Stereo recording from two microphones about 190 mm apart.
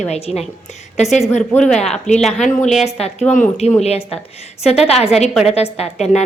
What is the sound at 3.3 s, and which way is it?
A woman's voice, 35° left (ahead or behind).